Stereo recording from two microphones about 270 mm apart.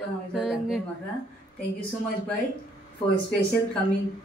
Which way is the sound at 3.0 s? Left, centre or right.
Left.